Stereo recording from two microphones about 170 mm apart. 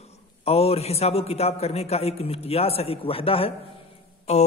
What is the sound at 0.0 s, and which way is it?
A man's voice, 35° left (ahead or behind).